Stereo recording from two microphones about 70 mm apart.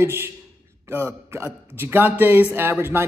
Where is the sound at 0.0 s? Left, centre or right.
Right.